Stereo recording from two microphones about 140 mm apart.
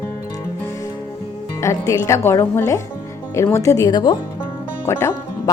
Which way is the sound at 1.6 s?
20° left (ahead or behind).